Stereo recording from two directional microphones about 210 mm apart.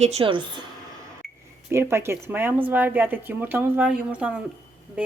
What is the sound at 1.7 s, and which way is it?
Speech, 10° right (ahead or behind).